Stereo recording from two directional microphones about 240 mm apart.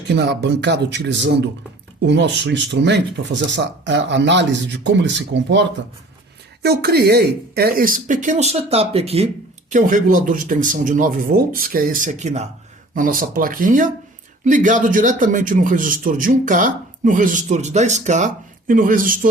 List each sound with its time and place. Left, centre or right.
0.1 s speech: right